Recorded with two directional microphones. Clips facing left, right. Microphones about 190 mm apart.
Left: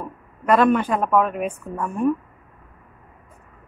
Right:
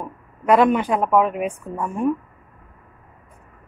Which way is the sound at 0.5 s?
15° right (ahead or behind).